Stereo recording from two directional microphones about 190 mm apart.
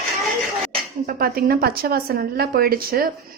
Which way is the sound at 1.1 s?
50° right (ahead or behind).